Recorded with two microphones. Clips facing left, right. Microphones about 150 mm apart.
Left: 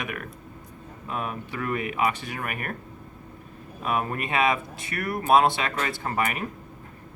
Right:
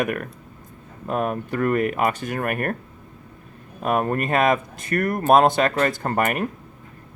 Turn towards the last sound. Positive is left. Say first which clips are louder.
# right 5 dB
turn(degrees=-55)  # may be behind; listen again after turning